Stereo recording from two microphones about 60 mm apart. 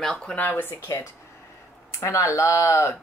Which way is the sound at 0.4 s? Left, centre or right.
Left.